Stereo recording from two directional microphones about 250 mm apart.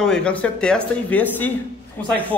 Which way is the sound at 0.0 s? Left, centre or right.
Centre.